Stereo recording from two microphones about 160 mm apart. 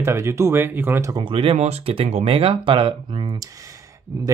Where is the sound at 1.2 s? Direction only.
35° right (ahead or behind); by 4.3 s 20° right (ahead or behind).